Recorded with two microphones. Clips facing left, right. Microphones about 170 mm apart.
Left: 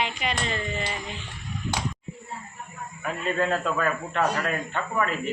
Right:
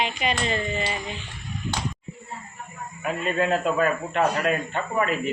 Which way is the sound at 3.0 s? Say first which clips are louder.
Right 2 dB; 20° right (ahead or behind).